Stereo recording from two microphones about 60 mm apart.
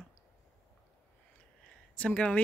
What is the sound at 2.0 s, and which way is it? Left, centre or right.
Speech, centre.